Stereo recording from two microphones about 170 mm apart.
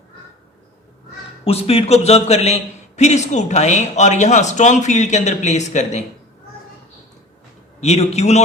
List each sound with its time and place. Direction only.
1.5 s a man's voice: 35° left (ahead or behind)
7.8 s a man's voice: 40° left (ahead or behind)